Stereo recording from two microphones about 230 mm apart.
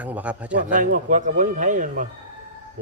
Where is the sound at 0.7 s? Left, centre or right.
Right.